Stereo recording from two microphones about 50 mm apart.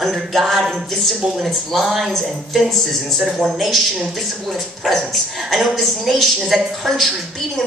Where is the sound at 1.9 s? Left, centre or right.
Centre.